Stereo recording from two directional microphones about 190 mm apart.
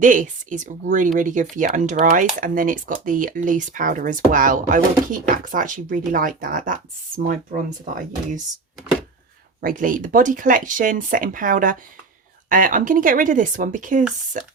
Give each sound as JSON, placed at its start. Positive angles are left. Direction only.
{"t": 0.0, "sound": "speech", "side_deg": -45}
{"t": 9.6, "sound": "speech", "side_deg": -45}